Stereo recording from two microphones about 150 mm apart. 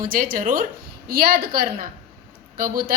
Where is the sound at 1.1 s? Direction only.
85° right.